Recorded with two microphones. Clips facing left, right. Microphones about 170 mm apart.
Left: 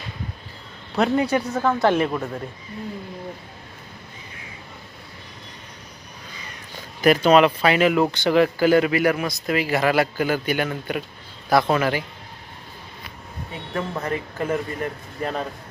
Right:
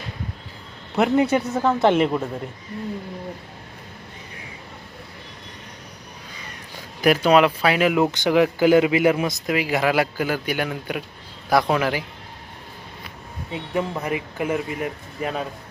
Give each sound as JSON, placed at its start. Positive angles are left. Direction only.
{"t": 0.9, "sound": "a man's voice", "side_deg": -20}
{"t": 7.0, "sound": "speech", "side_deg": -10}
{"t": 9.5, "sound": "a man's voice", "side_deg": -10}
{"t": 13.5, "sound": "speech", "side_deg": -15}